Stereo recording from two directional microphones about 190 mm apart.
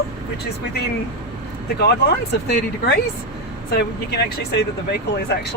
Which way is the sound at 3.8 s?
60° left (ahead or behind).